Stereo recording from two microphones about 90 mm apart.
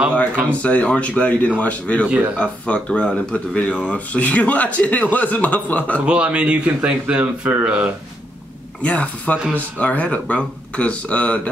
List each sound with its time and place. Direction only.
0.5 s a man's voice: 15° left (ahead or behind)
6.0 s a man's voice: 10° right (ahead or behind)
8.8 s a man's voice: 15° left (ahead or behind)